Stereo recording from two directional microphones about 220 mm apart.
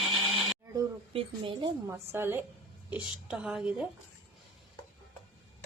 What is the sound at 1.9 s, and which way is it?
A woman's voice, 10° right (ahead or behind).